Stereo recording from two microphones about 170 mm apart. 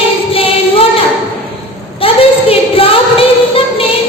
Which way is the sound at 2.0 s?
35° left (ahead or behind).